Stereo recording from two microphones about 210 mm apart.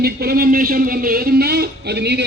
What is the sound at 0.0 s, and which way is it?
A man's voice, 45° right (ahead or behind).